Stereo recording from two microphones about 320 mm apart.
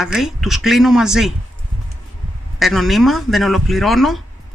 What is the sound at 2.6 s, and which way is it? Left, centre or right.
Speech, centre.